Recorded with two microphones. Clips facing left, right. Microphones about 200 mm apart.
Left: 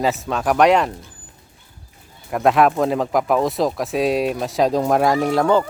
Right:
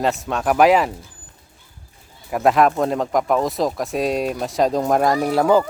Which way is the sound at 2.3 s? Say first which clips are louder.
Even; centre (ahead or behind).